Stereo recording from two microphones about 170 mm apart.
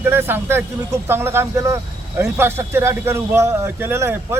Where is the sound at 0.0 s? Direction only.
10° right (ahead or behind).